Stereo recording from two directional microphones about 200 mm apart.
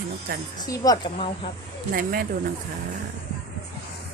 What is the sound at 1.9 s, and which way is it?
Speech, 45° right (ahead or behind).